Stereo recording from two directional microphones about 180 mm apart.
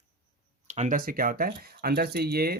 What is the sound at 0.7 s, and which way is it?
Speech, 45° right (ahead or behind).